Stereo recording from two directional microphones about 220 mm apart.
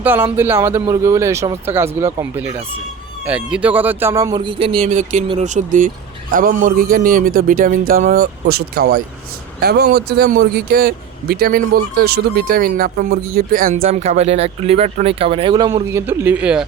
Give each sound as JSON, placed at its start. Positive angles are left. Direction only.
{"t": 0.0, "sound": "a man's voice", "side_deg": -10}
{"t": 13.8, "sound": "speech", "side_deg": -30}